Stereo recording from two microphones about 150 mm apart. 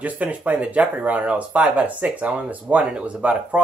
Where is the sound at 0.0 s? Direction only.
10° right (ahead or behind).